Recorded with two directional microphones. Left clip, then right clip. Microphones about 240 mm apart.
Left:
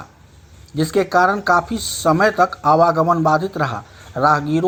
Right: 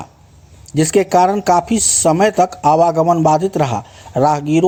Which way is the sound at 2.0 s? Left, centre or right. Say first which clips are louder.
Right 1 dB; right.